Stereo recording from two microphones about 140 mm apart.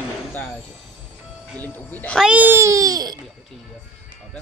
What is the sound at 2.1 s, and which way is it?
Speech, 10° right (ahead or behind).